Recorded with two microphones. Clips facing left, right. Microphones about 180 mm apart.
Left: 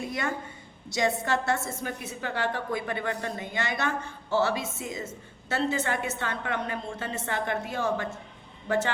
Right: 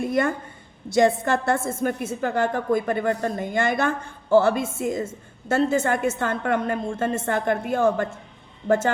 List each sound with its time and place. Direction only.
0.0 s a woman's voice: 50° right (ahead or behind)